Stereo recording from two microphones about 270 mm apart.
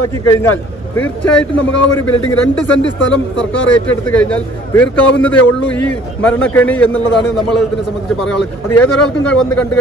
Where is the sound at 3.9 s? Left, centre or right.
Centre.